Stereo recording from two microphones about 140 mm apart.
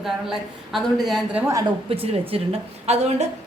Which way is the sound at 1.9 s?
45° right (ahead or behind).